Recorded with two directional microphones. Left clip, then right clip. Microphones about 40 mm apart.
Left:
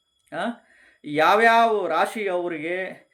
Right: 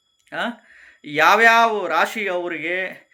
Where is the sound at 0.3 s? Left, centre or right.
Left.